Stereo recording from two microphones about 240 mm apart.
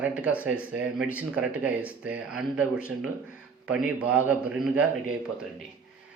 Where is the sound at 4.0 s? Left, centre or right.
Centre.